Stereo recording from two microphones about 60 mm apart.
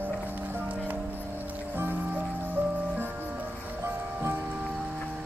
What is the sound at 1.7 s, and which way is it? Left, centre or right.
Music, right.